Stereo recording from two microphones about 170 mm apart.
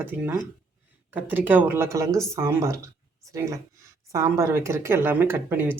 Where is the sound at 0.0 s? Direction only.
10° right (ahead or behind).